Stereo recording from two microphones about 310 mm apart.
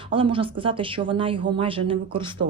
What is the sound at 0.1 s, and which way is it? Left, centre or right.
Speech, centre.